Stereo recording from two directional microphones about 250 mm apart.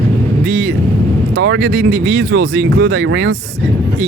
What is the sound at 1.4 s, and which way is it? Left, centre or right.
Speech, right.